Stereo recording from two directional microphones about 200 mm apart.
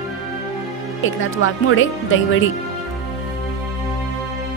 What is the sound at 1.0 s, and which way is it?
Speech, 80° left.